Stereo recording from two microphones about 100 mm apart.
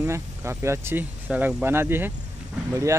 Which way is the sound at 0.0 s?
25° right (ahead or behind).